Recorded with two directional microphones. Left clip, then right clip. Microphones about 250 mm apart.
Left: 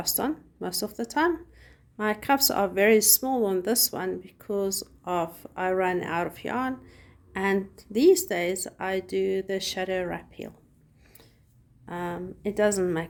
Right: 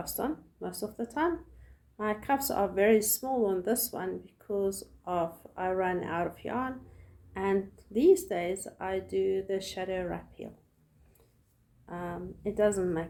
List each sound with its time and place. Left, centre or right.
0.0 s speech: left
11.9 s speech: left